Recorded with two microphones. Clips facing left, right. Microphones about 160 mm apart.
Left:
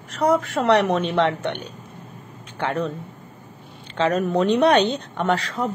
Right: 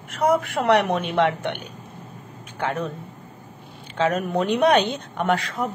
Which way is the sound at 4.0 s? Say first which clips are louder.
Left 2 dB; 10° right (ahead or behind).